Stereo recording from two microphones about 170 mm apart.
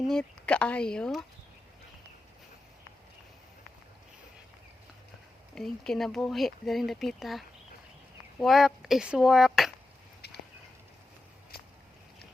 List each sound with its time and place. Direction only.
0.1 s speech: 5° left (ahead or behind)
5.5 s speech: centre (ahead or behind)
10.2 s a sound: 75° left (ahead or behind)